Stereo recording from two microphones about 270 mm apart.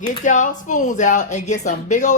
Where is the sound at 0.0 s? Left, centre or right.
Left.